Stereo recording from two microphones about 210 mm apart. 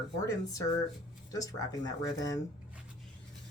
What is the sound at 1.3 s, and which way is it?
Speech, 15° left (ahead or behind).